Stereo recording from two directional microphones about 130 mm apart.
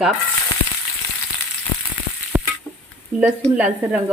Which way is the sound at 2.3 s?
10° right (ahead or behind).